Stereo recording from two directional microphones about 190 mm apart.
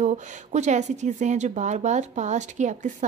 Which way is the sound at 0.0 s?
35° right (ahead or behind).